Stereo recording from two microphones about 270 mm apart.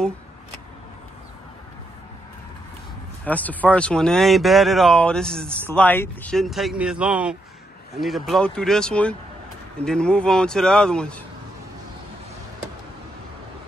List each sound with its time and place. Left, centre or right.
3.3 s speech: centre